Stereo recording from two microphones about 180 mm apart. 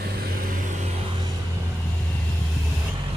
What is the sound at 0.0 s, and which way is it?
Vehicle, 60° right (ahead or behind).